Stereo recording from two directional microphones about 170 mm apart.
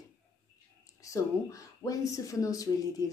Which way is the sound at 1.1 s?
20° left (ahead or behind).